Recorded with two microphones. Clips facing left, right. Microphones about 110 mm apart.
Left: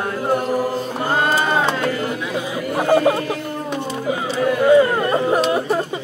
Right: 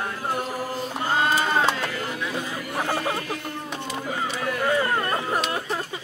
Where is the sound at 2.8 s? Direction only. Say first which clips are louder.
Left 11 dB; 45° left (ahead or behind).